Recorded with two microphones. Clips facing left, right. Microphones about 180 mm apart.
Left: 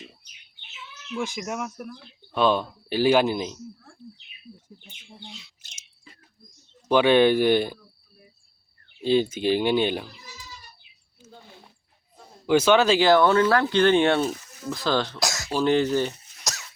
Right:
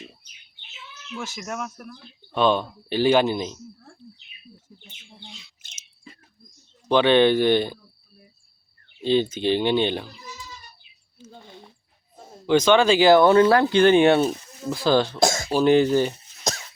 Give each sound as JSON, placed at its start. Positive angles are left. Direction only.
{"t": 1.1, "sound": "speech", "side_deg": 15}
{"t": 6.8, "sound": "speech", "side_deg": 10}
{"t": 9.0, "sound": "speech", "side_deg": 5}
{"t": 11.2, "sound": "a sound", "side_deg": 5}
{"t": 12.5, "sound": "speech", "side_deg": 5}
{"t": 13.1, "sound": "speech", "side_deg": -10}
{"t": 14.2, "sound": "speech", "side_deg": -20}
{"t": 14.7, "sound": "speech", "side_deg": -10}
{"t": 15.2, "sound": "cough", "side_deg": -25}
{"t": 15.5, "sound": "speech", "side_deg": -10}